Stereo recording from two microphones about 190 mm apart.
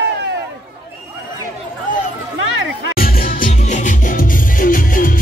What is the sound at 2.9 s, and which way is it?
Music, 50° left (ahead or behind).